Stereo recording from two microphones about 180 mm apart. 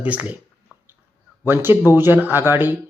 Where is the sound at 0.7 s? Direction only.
10° right (ahead or behind).